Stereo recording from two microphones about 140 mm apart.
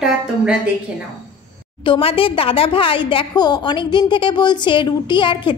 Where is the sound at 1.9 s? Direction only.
40° left (ahead or behind).